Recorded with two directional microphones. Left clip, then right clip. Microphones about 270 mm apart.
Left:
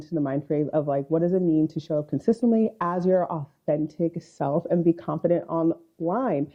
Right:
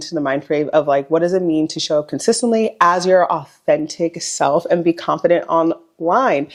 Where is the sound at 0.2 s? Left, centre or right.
Centre.